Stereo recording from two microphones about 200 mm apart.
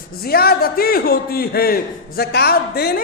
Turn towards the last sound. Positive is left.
turn(degrees=50)  # may be behind; listen again after turning